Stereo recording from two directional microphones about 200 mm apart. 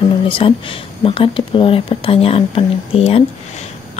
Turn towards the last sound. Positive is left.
turn(degrees=30)  # may be behind; listen again after turning